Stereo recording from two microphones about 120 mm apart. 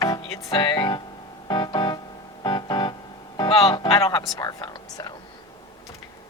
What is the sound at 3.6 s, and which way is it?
Speech, 30° left (ahead or behind).